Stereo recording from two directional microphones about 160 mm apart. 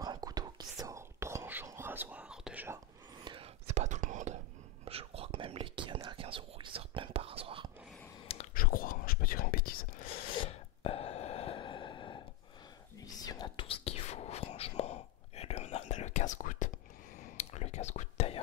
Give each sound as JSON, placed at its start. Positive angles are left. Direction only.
{"t": 0.0, "sound": "whispering", "side_deg": -25}
{"t": 3.3, "sound": "whispering", "side_deg": -40}
{"t": 4.8, "sound": "whispering", "side_deg": -35}
{"t": 8.5, "sound": "whispering", "side_deg": 65}
{"t": 10.3, "sound": "gasp", "side_deg": 35}
{"t": 13.0, "sound": "whispering", "side_deg": 25}